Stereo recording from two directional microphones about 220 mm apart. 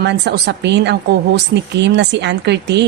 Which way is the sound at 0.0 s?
50° right (ahead or behind).